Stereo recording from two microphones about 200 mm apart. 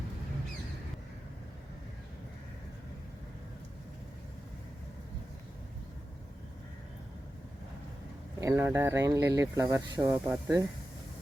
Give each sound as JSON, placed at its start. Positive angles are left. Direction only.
{"t": 8.4, "sound": "speech", "side_deg": -15}